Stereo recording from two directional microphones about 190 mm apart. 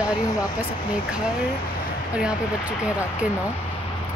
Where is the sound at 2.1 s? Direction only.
5° right (ahead or behind).